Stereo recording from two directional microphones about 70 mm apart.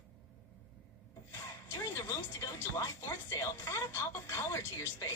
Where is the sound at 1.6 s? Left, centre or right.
Left.